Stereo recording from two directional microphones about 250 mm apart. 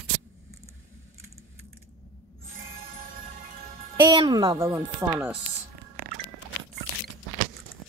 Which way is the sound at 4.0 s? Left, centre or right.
Centre.